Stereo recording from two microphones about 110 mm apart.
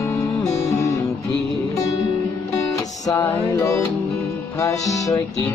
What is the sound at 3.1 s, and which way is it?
Music, 30° left (ahead or behind).